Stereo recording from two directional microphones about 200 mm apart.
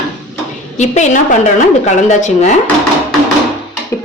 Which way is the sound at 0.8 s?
35° left (ahead or behind).